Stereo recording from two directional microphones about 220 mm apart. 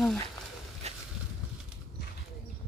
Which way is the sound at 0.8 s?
30° right (ahead or behind).